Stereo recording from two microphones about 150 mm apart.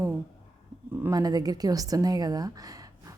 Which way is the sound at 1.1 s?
25° right (ahead or behind).